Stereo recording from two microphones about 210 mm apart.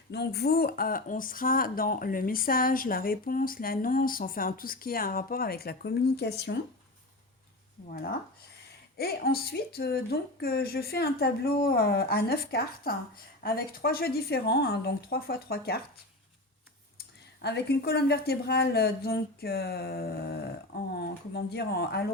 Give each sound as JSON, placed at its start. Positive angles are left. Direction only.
{"t": 0.1, "sound": "speech", "side_deg": 50}
{"t": 7.9, "sound": "speech", "side_deg": 45}
{"t": 17.4, "sound": "speech", "side_deg": 50}